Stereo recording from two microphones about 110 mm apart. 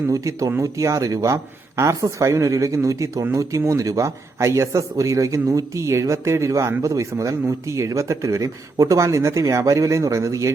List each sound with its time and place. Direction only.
0.1 s a man's voice: 30° right (ahead or behind)